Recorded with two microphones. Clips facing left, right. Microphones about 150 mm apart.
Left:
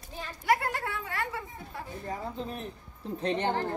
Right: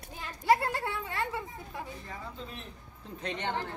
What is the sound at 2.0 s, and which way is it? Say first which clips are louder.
A woman's voice: left 7 dB; 45° left (ahead or behind).